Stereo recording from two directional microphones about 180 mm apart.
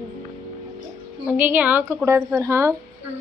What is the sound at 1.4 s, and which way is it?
A woman's voice, 10° right (ahead or behind).